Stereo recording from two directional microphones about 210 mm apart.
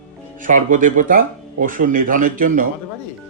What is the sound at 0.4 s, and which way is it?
Speech, 40° right (ahead or behind).